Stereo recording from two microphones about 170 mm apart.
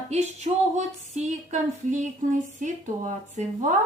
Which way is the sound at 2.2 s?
45° right (ahead or behind).